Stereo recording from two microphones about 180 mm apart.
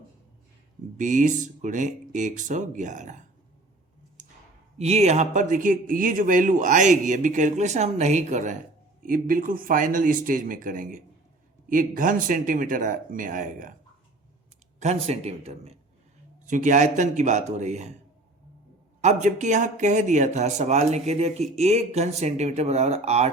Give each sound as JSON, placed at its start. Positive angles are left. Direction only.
{"t": 0.9, "sound": "speech", "side_deg": -45}
{"t": 4.8, "sound": "speech", "side_deg": -35}
{"t": 14.8, "sound": "speech", "side_deg": -35}
{"t": 19.0, "sound": "speech", "side_deg": -40}